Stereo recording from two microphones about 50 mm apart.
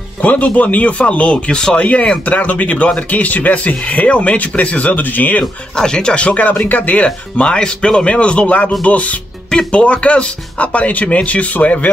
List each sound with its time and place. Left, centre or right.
0.2 s speech: left
5.4 s speech: centre
6.7 s speech: left
7.3 s speech: left